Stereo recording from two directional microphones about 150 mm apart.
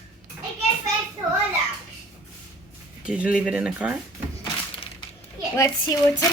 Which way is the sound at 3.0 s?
5° right (ahead or behind).